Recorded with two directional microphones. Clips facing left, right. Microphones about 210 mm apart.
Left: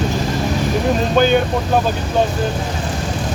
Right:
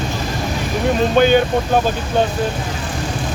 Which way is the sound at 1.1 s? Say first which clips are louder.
Right 1 dB; centre (ahead or behind).